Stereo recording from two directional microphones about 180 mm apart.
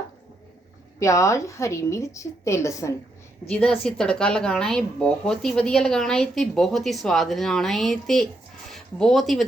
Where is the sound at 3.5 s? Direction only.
5° left (ahead or behind).